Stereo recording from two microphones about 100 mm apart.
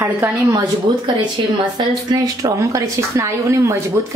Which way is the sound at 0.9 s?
50° right (ahead or behind).